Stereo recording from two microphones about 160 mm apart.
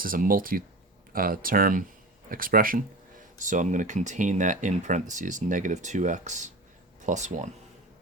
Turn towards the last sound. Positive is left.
turn(degrees=-50)  # may be behind; listen again after turning